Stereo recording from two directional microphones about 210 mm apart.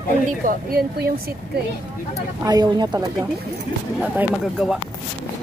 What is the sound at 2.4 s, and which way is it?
Speech, 20° right (ahead or behind).